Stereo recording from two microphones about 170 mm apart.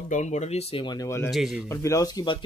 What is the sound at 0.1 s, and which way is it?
Speech, 45° left (ahead or behind).